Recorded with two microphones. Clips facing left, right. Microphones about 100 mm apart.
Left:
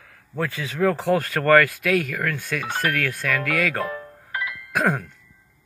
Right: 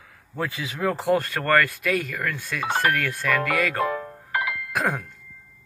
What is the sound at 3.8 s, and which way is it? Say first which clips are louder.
Music: right 4 dB; 70° right (ahead or behind).